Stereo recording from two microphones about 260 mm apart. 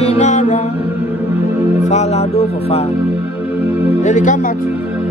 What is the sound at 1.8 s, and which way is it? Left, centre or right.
Music, left.